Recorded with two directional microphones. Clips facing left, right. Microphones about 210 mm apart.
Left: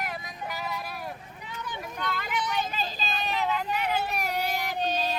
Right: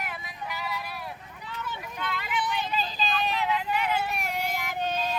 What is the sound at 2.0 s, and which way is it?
Vehicle, 45° left (ahead or behind).